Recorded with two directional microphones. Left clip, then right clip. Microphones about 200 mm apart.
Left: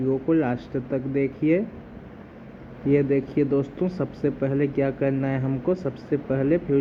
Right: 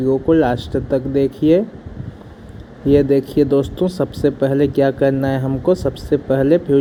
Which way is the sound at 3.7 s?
20° right (ahead or behind).